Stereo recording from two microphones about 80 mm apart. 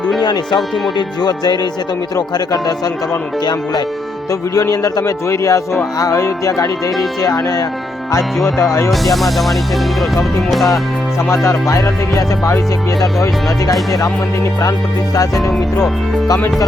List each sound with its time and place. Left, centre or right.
0.2 s a man's voice: left
8.9 s speech: centre
11.2 s a man's voice: left
15.1 s speech: left
15.4 s speech: centre